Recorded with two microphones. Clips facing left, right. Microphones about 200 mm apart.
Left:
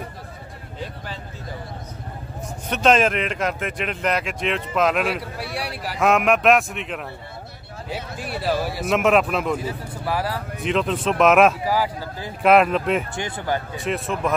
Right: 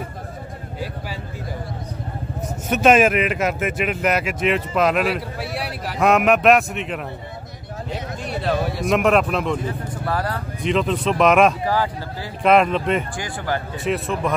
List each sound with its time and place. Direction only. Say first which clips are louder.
2.7 s speech: right 3 dB; 10° right (ahead or behind)
13.1 s speech: even; 25° left (ahead or behind)
13.8 s speech: right 2 dB; centre (ahead or behind)